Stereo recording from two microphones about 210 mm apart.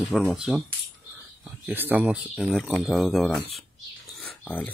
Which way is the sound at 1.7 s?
10° right (ahead or behind).